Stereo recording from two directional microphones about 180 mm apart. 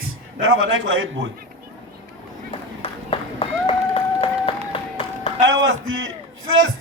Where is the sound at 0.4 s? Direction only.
90° right.